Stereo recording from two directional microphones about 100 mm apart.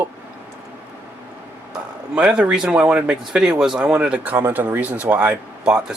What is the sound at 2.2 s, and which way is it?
Speech, 10° right (ahead or behind).